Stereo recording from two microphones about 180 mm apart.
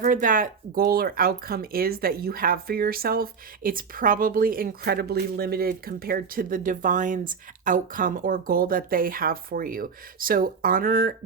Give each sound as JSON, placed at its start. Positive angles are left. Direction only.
{"t": 0.0, "sound": "speech", "side_deg": -50}